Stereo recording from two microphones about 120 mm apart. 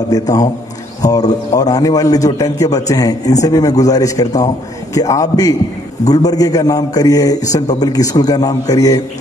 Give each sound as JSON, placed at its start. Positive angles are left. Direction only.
{"t": 0.1, "sound": "a man's voice", "side_deg": 30}